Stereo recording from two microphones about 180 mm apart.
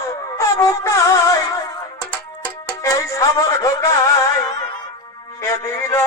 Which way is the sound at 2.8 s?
15° left (ahead or behind).